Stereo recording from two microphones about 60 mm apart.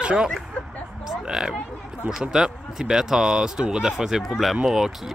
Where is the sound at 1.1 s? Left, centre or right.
Centre.